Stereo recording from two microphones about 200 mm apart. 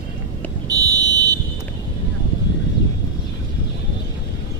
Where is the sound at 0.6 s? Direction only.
20° right (ahead or behind).